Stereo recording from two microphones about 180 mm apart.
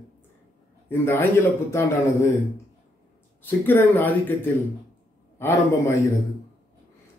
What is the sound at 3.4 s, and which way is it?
A man's voice, 10° left (ahead or behind).